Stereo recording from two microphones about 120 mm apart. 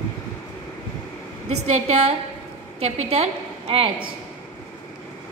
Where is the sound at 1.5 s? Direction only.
70° right (ahead or behind); by 3.9 s 55° right (ahead or behind).